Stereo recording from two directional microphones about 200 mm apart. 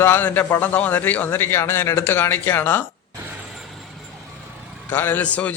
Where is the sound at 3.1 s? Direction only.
10° right (ahead or behind).